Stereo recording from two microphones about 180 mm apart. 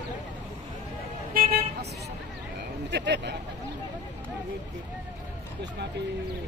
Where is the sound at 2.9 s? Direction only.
70° right (ahead or behind).